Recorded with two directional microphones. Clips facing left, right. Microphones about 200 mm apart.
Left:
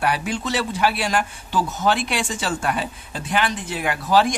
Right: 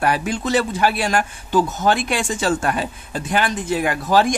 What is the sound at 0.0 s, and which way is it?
Speech, 45° right (ahead or behind).